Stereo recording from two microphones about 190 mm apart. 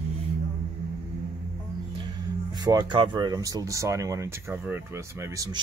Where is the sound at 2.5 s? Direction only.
20° right (ahead or behind).